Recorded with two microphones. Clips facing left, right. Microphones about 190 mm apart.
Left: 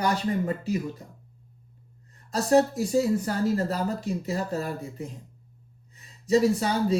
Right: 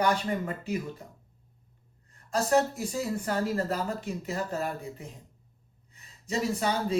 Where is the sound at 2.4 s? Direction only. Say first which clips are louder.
Left 6 dB; 35° left (ahead or behind).